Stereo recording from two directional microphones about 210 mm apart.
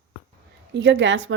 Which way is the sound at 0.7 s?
60° right (ahead or behind).